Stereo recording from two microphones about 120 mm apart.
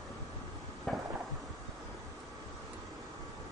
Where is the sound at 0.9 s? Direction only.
5° left (ahead or behind).